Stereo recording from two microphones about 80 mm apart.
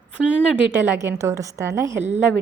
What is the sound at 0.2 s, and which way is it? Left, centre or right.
Speech, right.